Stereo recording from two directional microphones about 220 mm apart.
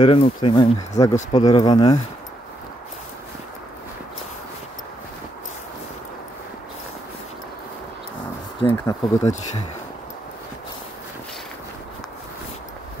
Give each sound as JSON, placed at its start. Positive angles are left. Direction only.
{"t": 0.0, "sound": "speech", "side_deg": 25}
{"t": 8.5, "sound": "speech", "side_deg": 25}